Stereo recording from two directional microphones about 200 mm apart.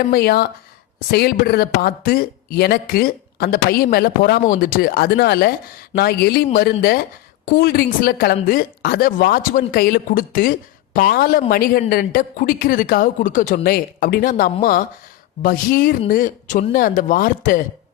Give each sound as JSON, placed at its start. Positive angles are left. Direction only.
{"t": 0.1, "sound": "speech", "side_deg": 50}